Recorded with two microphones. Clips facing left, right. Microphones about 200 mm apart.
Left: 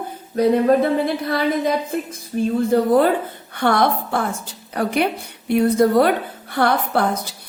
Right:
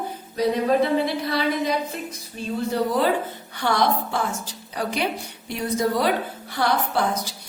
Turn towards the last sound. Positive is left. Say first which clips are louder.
# left 3 dB
turn(degrees=55)  # may be behind; listen again after turning